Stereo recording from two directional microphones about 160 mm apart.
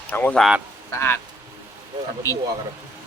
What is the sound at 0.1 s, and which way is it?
Speech, 10° left (ahead or behind).